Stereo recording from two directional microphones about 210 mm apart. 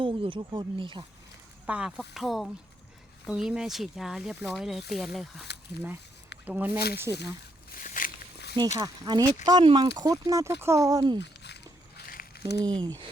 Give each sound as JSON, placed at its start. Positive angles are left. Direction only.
{"t": 0.0, "sound": "speech", "side_deg": -25}
{"t": 1.6, "sound": "speech", "side_deg": -5}
{"t": 7.7, "sound": "walk", "side_deg": 40}
{"t": 8.8, "sound": "speech", "side_deg": -20}
{"t": 11.2, "sound": "a sound", "side_deg": 50}
{"t": 12.5, "sound": "speech", "side_deg": -20}